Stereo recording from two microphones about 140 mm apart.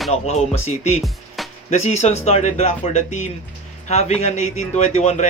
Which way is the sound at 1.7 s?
50° left (ahead or behind).